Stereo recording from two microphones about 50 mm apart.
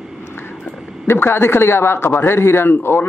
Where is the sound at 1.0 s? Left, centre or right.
Left.